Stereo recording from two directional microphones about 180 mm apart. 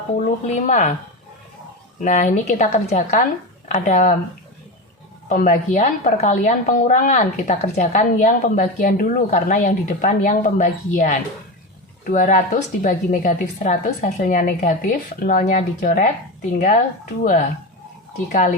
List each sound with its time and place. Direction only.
0.4 s a woman's voice: 45° left (ahead or behind)
2.0 s a woman's voice: 40° left (ahead or behind)
5.3 s a woman's voice: 45° left (ahead or behind)
18.3 s a woman's voice: 45° left (ahead or behind)